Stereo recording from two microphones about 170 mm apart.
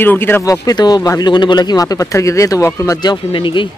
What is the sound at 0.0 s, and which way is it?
Speech, 10° left (ahead or behind).